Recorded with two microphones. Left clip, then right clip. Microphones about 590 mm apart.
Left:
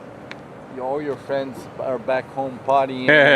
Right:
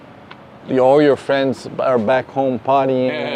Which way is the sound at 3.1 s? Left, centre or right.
Left.